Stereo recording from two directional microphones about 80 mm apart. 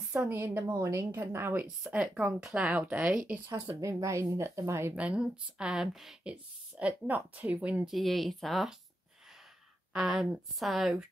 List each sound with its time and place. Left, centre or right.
0.3 s a woman's voice: right
1.8 s speech: centre
3.6 s speech: right
4.9 s speech: centre
7.8 s a woman's voice: centre
9.9 s a woman's voice: centre